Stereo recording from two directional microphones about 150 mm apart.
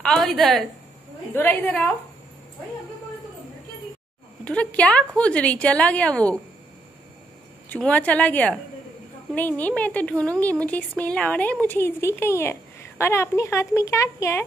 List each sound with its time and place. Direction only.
0.0 s a woman's voice: 5° left (ahead or behind)
1.3 s a woman's voice: 15° left (ahead or behind)
4.5 s a woman's voice: 10° left (ahead or behind)
7.7 s a woman's voice: 10° left (ahead or behind)